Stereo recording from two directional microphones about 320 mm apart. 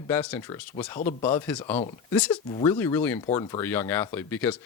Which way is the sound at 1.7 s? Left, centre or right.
Centre.